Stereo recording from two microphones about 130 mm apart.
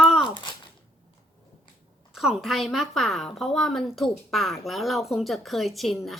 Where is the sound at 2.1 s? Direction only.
5° right (ahead or behind).